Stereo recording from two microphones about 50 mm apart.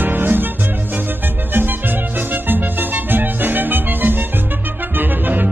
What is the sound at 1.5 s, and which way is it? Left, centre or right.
Music, right.